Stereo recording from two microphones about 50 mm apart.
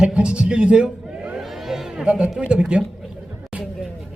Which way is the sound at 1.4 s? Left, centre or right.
Centre.